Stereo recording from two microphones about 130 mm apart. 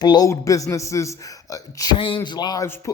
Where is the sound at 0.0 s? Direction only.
30° left (ahead or behind).